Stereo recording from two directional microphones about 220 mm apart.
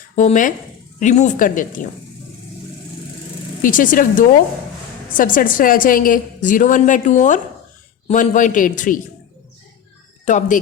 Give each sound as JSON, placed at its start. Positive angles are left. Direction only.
{"t": 0.2, "sound": "a woman's voice", "side_deg": 35}
{"t": 3.6, "sound": "a woman's voice", "side_deg": 40}
{"t": 10.2, "sound": "a woman's voice", "side_deg": 35}